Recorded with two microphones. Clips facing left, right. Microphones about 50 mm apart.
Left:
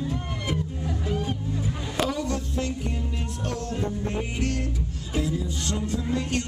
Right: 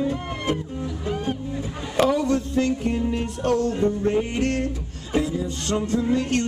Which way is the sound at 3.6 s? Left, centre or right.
Centre.